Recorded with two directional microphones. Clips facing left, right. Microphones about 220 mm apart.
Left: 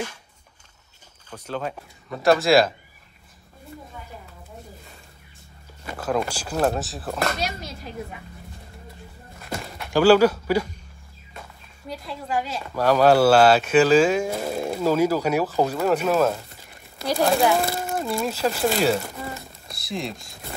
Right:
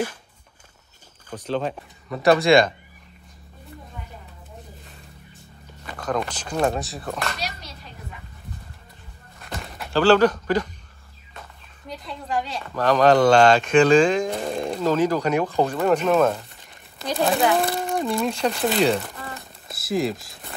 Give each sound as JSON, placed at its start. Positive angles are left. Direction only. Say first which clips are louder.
{"t": 1.3, "sound": "speech", "louder": "right 4 dB", "side_deg": 5}
{"t": 5.9, "sound": "speech", "louder": "left 1 dB", "side_deg": 5}
{"t": 7.2, "sound": "speech", "louder": "left 4 dB", "side_deg": 45}
{"t": 9.4, "sound": "a sound", "louder": "left 2 dB", "side_deg": 0}
{"t": 9.9, "sound": "speech", "louder": "left 1 dB", "side_deg": 10}
{"t": 11.9, "sound": "speech", "louder": "even", "side_deg": 5}